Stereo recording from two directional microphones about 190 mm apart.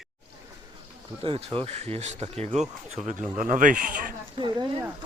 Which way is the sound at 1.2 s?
30° right (ahead or behind).